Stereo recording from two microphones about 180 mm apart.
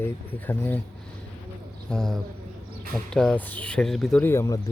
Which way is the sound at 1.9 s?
Centre (ahead or behind).